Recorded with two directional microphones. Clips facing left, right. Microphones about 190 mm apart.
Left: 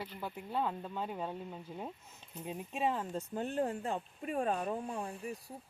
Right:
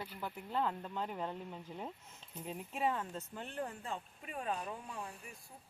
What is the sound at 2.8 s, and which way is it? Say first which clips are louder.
Speech: left 2 dB; 25° left (ahead or behind).